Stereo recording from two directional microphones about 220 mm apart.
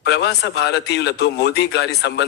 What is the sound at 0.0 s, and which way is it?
A man's voice, 50° left (ahead or behind).